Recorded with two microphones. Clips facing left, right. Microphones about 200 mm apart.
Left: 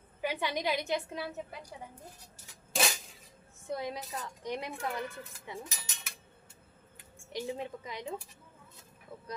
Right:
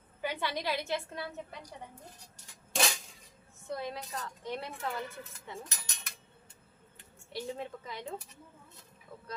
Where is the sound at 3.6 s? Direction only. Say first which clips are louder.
Left 1 dB; 15° left (ahead or behind).